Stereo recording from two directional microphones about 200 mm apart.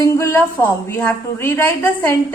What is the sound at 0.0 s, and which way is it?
A woman's voice, 15° left (ahead or behind).